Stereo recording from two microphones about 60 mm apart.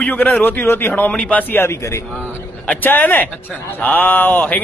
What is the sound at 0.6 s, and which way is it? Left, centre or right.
Speech, left.